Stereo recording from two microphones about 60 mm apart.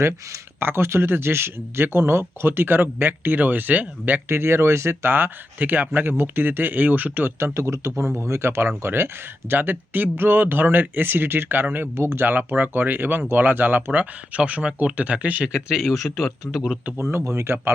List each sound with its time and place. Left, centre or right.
0.6 s speech: right
4.3 s speech: right
7.3 s a man's voice: right
12.3 s speech: right
15.7 s a man's voice: centre
17.0 s a man's voice: right